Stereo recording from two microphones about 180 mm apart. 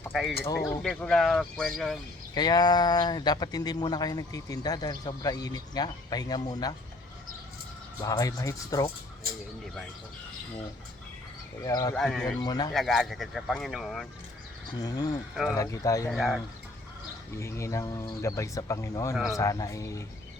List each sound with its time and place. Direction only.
0.1 s speech: centre (ahead or behind)
2.3 s speech: 20° left (ahead or behind)
8.0 s speech: 20° left (ahead or behind)
11.6 s speech: 20° left (ahead or behind)
11.9 s speech: 5° left (ahead or behind)
12.4 s speech: 25° left (ahead or behind)
12.7 s speech: centre (ahead or behind)
14.7 s speech: 20° left (ahead or behind)
16.0 s speech: centre (ahead or behind)
17.3 s speech: 15° left (ahead or behind)